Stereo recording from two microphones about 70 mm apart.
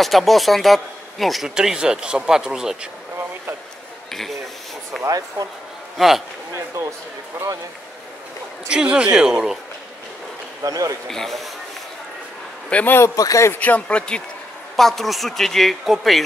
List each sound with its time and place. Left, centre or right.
0.0 s speech: centre
5.0 s speech: right
5.9 s speech: centre
6.5 s a sound: right
8.6 s speech: centre
10.6 s speech: right
11.1 s speech: centre
12.6 s a man's voice: centre
13.1 s speech: left
13.5 s speech: left
14.8 s speech: centre